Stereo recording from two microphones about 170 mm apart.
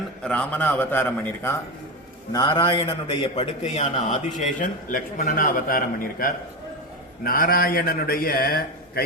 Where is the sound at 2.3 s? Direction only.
25° left (ahead or behind); by 5.8 s 55° left (ahead or behind).